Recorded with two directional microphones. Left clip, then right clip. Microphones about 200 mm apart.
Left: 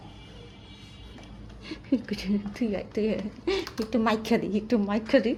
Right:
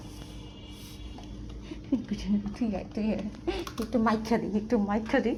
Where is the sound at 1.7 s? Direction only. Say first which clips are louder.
Left 3 dB; 40° left (ahead or behind).